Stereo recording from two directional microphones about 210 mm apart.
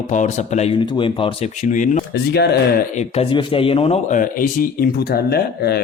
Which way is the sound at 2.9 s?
30° left (ahead or behind).